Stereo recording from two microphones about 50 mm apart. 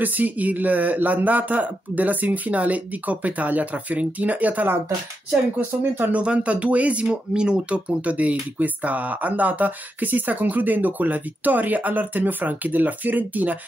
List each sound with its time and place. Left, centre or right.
0.0 s speech: right
6.1 s speech: right